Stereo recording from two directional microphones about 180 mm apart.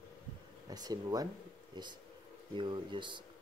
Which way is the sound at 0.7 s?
20° right (ahead or behind).